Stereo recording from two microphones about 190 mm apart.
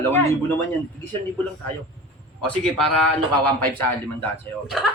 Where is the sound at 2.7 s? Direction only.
Centre (ahead or behind).